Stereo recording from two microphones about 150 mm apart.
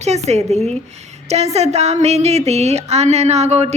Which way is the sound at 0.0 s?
45° right (ahead or behind).